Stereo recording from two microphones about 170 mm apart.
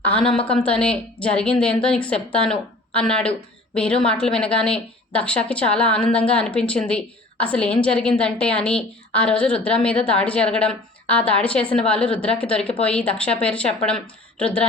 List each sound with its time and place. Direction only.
0.0 s a woman's voice: 5° left (ahead or behind)